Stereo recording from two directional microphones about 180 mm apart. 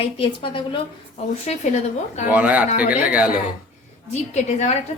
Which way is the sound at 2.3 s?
10° right (ahead or behind).